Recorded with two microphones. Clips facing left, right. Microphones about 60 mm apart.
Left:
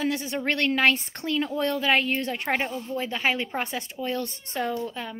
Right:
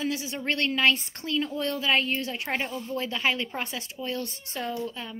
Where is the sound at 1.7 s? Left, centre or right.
Left.